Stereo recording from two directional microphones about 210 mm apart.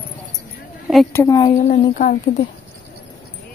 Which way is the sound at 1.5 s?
35° left (ahead or behind).